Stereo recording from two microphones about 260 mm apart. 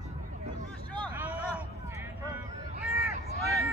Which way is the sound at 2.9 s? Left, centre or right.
Left.